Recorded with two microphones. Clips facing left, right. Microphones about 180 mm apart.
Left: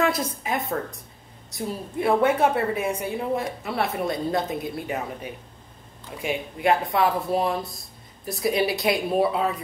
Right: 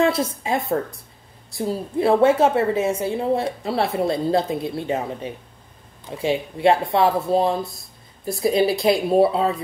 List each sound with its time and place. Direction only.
0.0 s a woman's voice: 25° right (ahead or behind)